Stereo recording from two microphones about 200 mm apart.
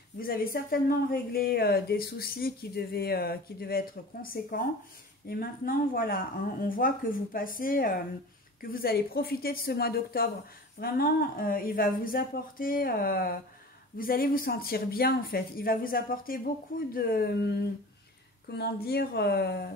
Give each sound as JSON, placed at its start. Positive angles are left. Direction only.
{"t": 0.2, "sound": "speech", "side_deg": 45}